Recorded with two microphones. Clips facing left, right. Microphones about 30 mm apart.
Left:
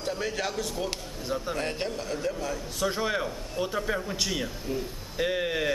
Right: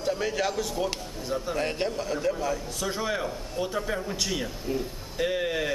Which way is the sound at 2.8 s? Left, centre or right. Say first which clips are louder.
Left 4 dB; centre.